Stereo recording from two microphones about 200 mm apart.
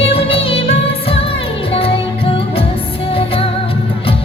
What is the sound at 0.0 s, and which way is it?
Music, 30° left (ahead or behind).